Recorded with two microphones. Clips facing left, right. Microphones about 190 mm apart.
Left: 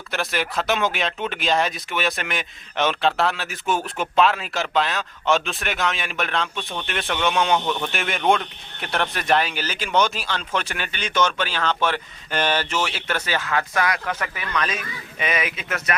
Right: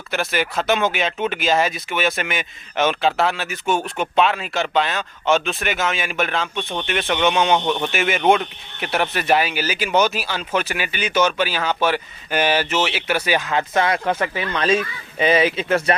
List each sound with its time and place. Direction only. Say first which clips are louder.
0.1 s speech: right 3 dB; centre (ahead or behind)
7.6 s speech: right 4 dB; 20° right (ahead or behind)
7.9 s speech: right 4 dB; centre (ahead or behind); by 16.0 s 30° right (ahead or behind)